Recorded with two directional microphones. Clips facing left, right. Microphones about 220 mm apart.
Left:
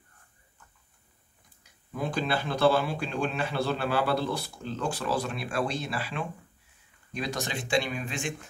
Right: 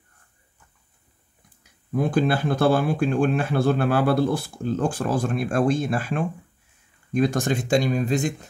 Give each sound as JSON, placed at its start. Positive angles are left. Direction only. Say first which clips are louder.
{"t": 1.6, "sound": "speech", "louder": "right 9 dB", "side_deg": -50}